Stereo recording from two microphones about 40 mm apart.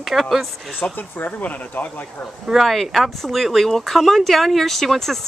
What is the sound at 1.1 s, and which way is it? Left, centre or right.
Speech, left.